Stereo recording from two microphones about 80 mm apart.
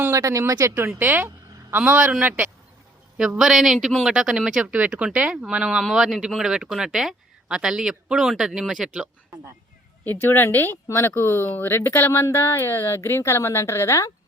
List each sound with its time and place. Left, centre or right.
0.1 s speech: right
0.9 s speech: right
3.2 s speech: centre
10.0 s a woman's voice: left